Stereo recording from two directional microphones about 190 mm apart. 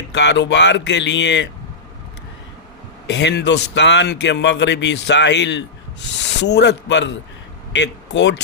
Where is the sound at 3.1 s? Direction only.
65° left (ahead or behind).